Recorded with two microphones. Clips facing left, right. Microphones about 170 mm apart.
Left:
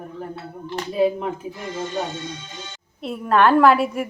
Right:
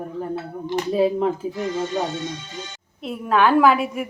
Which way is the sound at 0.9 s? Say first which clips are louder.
Even; 35° right (ahead or behind).